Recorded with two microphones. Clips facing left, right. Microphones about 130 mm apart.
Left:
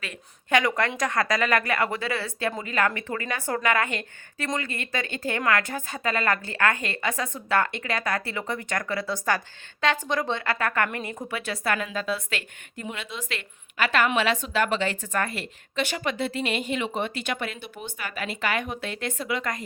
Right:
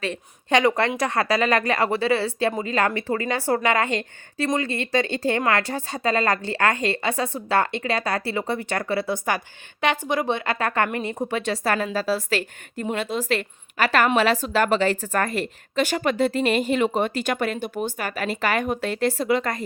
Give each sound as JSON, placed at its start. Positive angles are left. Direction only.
{"t": 0.0, "sound": "speech", "side_deg": -30}
{"t": 10.1, "sound": "a woman's voice", "side_deg": -15}